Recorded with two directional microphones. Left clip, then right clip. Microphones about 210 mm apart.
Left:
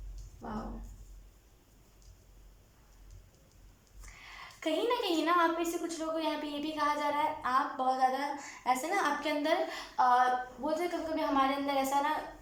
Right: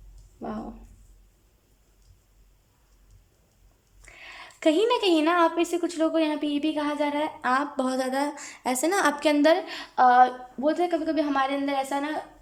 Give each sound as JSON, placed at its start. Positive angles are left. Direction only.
{"t": 4.2, "sound": "a woman's voice", "side_deg": -50}